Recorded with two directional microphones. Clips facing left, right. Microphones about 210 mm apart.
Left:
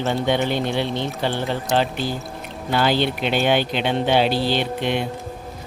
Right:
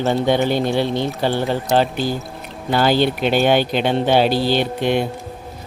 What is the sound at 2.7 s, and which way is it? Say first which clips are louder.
Speech: right 4 dB; 40° right (ahead or behind).